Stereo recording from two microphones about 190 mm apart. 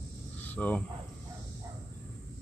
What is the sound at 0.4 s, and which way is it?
Cricket, 10° left (ahead or behind).